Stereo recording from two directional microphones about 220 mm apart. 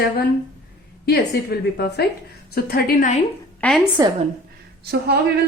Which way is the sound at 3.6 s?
5° left (ahead or behind).